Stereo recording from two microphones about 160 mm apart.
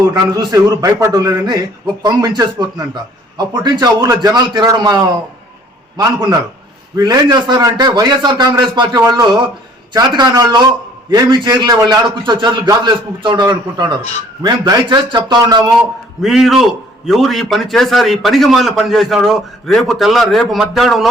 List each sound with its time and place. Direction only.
0.1 s a man's voice: 25° right (ahead or behind)
6.9 s a man's voice: 25° right (ahead or behind)
16.2 s a man's voice: centre (ahead or behind)